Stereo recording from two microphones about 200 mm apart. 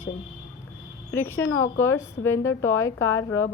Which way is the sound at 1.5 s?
90° left.